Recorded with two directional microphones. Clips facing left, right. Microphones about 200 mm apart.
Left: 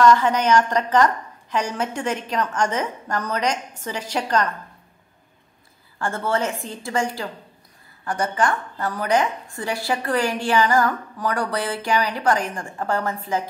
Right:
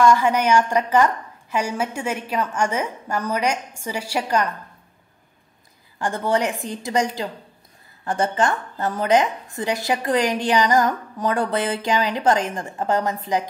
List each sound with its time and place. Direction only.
0.0 s a woman's voice: 10° right (ahead or behind)
5.9 s a woman's voice: 15° right (ahead or behind)